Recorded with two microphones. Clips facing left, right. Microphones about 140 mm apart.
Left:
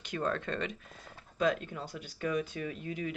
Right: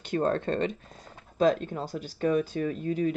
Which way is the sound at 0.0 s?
35° right (ahead or behind).